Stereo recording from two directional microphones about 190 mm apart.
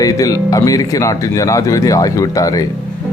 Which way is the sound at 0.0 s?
20° left (ahead or behind).